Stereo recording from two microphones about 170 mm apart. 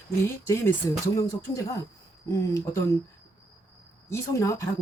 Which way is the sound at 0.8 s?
15° left (ahead or behind).